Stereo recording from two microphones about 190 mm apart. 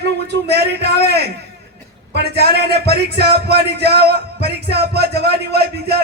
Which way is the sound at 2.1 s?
60° right (ahead or behind).